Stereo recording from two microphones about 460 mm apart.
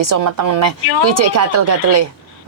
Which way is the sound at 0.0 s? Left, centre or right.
Right.